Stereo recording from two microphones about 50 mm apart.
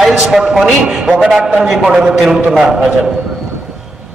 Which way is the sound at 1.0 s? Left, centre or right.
Right.